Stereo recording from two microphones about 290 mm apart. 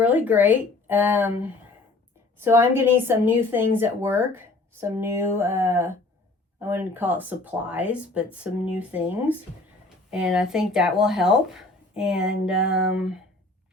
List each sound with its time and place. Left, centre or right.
0.0 s a woman's voice: centre